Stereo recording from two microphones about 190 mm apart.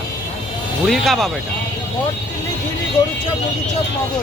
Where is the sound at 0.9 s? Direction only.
Centre (ahead or behind).